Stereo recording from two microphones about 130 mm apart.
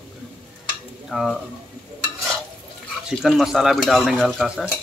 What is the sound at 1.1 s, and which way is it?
Speech, centre (ahead or behind).